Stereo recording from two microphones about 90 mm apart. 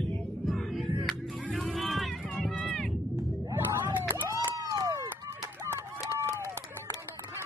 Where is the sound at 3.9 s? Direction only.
25° right (ahead or behind).